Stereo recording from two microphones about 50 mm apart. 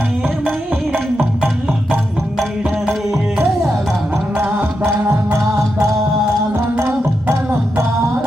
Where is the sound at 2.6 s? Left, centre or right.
Centre.